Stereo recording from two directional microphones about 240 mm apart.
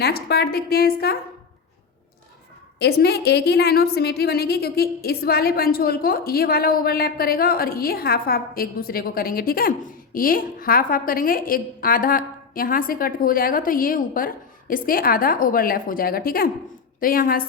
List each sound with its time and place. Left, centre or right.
0.0 s a woman's voice: left
2.8 s a woman's voice: left